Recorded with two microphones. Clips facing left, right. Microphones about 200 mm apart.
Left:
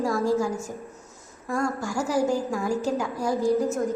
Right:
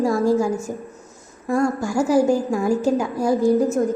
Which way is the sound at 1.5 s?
25° right (ahead or behind).